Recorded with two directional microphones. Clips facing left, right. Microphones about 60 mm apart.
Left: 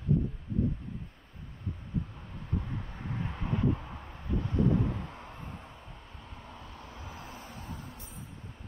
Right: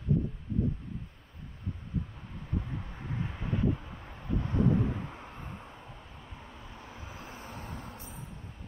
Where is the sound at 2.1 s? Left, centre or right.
Centre; by 7.4 s right.